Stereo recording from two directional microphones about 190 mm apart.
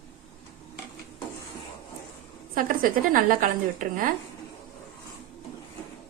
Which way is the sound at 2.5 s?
45° right (ahead or behind).